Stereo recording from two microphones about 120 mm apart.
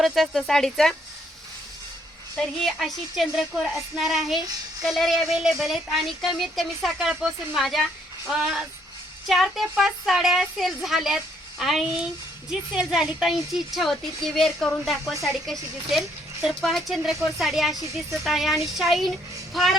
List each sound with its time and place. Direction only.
0.0 s speech: centre (ahead or behind)
2.3 s speech: centre (ahead or behind)